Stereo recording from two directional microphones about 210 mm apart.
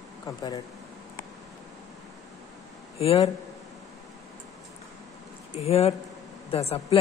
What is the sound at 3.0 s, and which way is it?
Speech, 30° left (ahead or behind).